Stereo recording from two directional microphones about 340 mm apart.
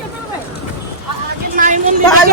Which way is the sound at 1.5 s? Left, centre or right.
Right.